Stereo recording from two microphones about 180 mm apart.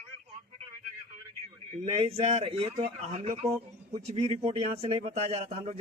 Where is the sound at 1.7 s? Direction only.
35° right (ahead or behind).